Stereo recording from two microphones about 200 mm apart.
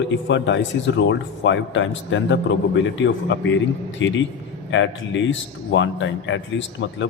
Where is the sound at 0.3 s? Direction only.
65° left (ahead or behind).